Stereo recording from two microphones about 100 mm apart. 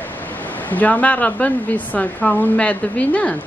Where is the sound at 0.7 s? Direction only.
15° left (ahead or behind).